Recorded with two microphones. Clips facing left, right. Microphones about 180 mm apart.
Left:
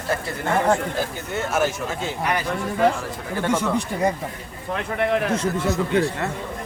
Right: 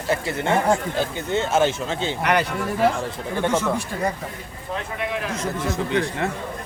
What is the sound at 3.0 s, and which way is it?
Speech, 20° right (ahead or behind).